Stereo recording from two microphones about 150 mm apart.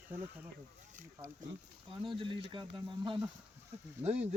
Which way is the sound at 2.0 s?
35° right (ahead or behind).